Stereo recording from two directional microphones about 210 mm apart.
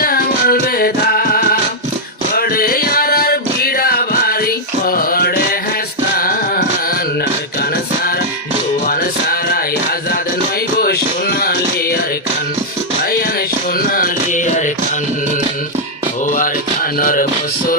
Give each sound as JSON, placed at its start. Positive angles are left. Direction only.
{"t": 0.0, "sound": "music", "side_deg": 45}
{"t": 8.8, "sound": "music", "side_deg": 45}
{"t": 10.8, "sound": "music", "side_deg": 45}
{"t": 13.7, "sound": "music", "side_deg": 45}
{"t": 17.0, "sound": "music", "side_deg": 40}